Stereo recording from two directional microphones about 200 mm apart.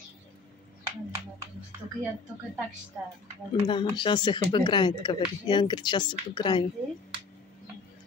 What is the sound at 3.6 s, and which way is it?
Speech, 25° left (ahead or behind).